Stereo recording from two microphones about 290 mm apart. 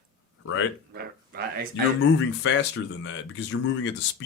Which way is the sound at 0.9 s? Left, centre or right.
Right.